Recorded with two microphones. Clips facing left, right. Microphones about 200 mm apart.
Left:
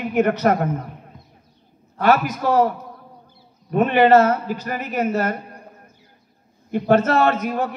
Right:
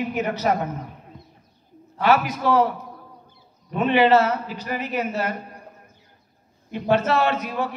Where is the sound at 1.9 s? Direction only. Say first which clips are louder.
Left 2 dB; 45° left (ahead or behind).